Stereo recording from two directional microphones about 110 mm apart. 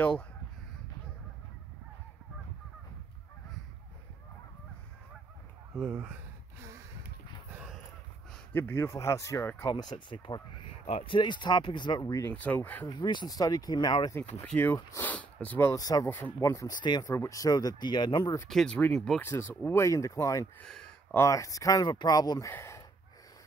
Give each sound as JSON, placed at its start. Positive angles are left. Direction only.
{"t": 5.8, "sound": "speech", "side_deg": -10}
{"t": 8.5, "sound": "speech", "side_deg": 20}
{"t": 9.7, "sound": "speech", "side_deg": 40}
{"t": 12.0, "sound": "speech", "side_deg": 30}
{"t": 12.9, "sound": "speech", "side_deg": 45}
{"t": 14.4, "sound": "speech", "side_deg": 15}
{"t": 15.7, "sound": "speech", "side_deg": 30}
{"t": 16.8, "sound": "speech", "side_deg": 40}
{"t": 17.1, "sound": "speech", "side_deg": 25}
{"t": 18.5, "sound": "speech", "side_deg": 0}
{"t": 19.2, "sound": "speech", "side_deg": 20}
{"t": 22.5, "sound": "a sound", "side_deg": 25}